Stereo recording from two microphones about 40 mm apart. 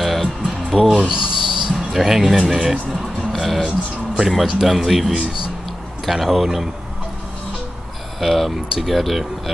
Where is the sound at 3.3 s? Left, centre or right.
Centre.